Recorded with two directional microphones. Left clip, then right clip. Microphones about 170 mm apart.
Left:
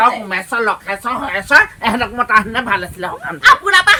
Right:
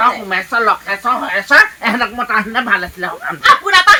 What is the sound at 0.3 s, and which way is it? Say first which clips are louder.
Speech: right 3 dB; 30° left (ahead or behind).